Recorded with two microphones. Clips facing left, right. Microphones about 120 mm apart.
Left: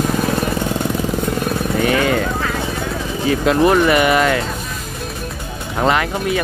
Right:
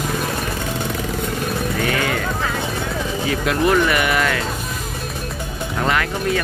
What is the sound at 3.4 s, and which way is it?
Speech, 25° left (ahead or behind).